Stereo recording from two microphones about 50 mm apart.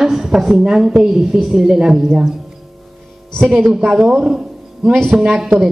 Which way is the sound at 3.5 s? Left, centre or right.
Centre.